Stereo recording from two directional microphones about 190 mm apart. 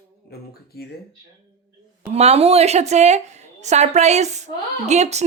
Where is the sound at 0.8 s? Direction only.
55° left (ahead or behind).